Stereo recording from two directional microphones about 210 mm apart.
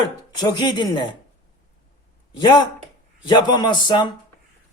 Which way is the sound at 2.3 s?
20° left (ahead or behind).